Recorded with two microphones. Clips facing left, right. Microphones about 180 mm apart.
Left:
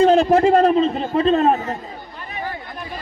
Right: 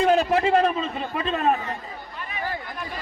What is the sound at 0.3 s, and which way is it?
Speech, 40° left (ahead or behind).